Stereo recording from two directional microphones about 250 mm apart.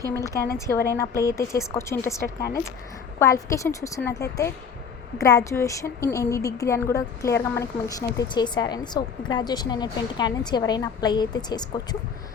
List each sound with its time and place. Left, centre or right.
0.1 s a woman's voice: centre
5.2 s a woman's voice: centre